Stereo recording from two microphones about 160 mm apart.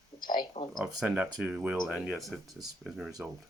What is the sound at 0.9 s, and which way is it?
Speech, 10° right (ahead or behind).